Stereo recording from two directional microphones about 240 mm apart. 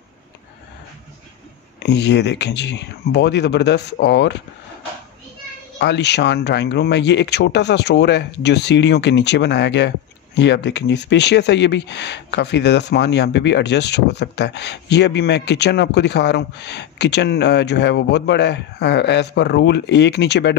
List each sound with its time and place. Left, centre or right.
1.8 s speech: left
5.8 s speech: left